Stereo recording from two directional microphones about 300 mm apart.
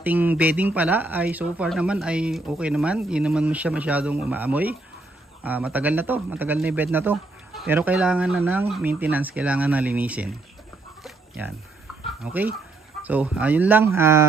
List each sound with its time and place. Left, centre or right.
0.0 s speech: centre
11.1 s a sound: centre
12.2 s speech: centre